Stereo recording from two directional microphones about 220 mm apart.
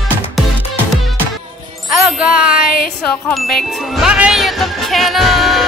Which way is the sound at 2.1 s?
5° right (ahead or behind).